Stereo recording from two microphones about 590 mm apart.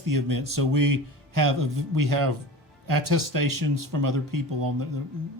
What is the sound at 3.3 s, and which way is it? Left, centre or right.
Speech, right.